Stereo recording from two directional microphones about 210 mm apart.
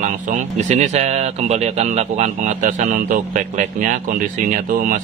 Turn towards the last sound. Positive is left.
turn(degrees=-40)  # may be behind; listen again after turning